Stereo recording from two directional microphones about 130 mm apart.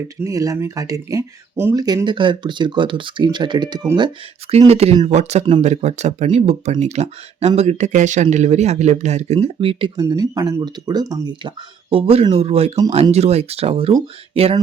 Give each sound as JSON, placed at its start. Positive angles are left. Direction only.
{"t": 0.3, "sound": "speech", "side_deg": -25}
{"t": 4.5, "sound": "speech", "side_deg": -55}
{"t": 10.0, "sound": "speech", "side_deg": -30}